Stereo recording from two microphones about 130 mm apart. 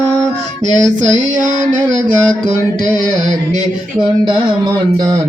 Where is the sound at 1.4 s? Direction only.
5° left (ahead or behind).